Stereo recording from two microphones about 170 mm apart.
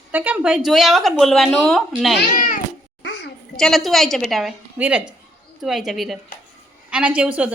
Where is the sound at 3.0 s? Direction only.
90° left.